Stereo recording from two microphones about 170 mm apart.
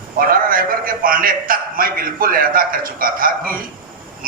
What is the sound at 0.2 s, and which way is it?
A man's voice, 55° right (ahead or behind).